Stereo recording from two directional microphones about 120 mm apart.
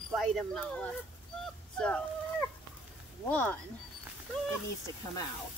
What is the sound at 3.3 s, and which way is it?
Speech, 15° left (ahead or behind).